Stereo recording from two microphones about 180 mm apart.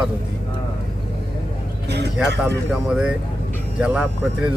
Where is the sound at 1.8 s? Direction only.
65° right (ahead or behind).